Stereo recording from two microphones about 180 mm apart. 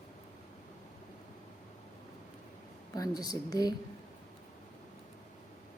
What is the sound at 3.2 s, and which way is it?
Speech, 20° left (ahead or behind).